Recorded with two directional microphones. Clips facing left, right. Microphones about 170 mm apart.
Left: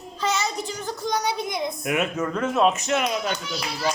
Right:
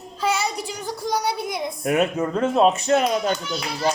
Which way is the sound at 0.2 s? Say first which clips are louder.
Right 2 dB; 10° right (ahead or behind).